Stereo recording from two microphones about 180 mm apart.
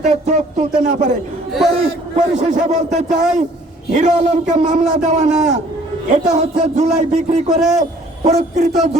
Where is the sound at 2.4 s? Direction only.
40° right (ahead or behind).